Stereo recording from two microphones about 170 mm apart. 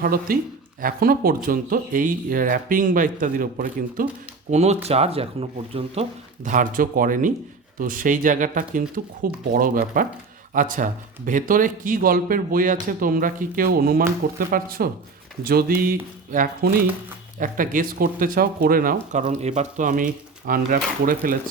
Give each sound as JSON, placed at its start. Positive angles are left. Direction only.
{"t": 0.0, "sound": "speech", "side_deg": -60}
{"t": 4.5, "sound": "speech", "side_deg": -40}
{"t": 17.4, "sound": "speech", "side_deg": -55}